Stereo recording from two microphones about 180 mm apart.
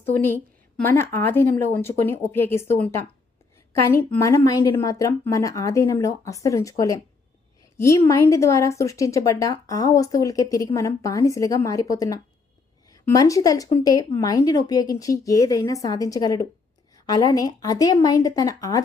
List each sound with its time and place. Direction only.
0.9 s a woman's voice: 15° left (ahead or behind)